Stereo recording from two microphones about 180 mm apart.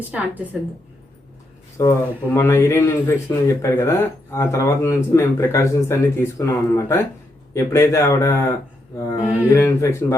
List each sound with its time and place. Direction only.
0.1 s a woman's voice: 10° right (ahead or behind)
1.8 s speech: 15° left (ahead or behind)